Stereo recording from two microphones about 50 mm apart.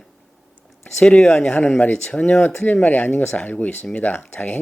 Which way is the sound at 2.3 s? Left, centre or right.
Left.